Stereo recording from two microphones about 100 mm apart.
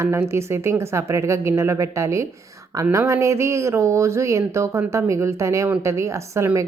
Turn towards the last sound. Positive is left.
turn(degrees=-30)  # may be behind; listen again after turning